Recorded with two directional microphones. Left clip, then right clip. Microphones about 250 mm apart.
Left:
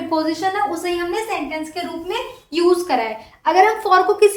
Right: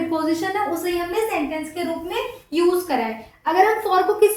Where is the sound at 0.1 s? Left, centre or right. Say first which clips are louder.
Left 6 dB; centre.